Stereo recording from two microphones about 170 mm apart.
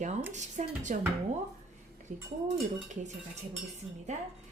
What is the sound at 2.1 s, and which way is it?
Speech, 45° right (ahead or behind).